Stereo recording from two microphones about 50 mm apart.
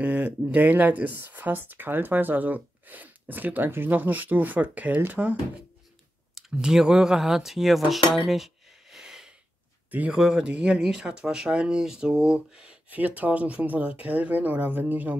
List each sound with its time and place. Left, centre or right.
0.0 s speech: right
6.5 s speech: centre
8.9 s a sound: centre
9.8 s speech: right
10.1 s speech: centre
12.9 s speech: right